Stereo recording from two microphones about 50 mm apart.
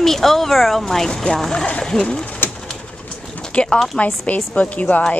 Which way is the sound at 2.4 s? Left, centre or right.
Left.